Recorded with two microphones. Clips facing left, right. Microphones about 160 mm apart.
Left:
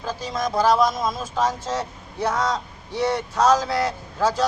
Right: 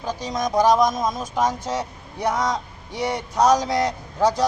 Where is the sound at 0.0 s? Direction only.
15° right (ahead or behind).